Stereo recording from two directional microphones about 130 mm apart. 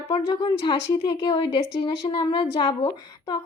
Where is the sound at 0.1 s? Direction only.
40° left (ahead or behind).